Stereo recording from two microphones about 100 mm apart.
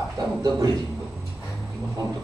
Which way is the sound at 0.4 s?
40° right (ahead or behind).